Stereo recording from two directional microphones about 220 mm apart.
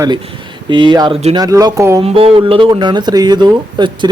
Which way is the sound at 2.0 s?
25° right (ahead or behind).